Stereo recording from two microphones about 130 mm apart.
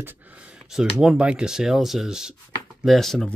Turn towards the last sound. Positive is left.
turn(degrees=0)  # may be behind; listen again after turning